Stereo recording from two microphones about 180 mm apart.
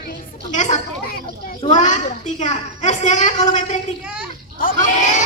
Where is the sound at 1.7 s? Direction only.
45° left (ahead or behind).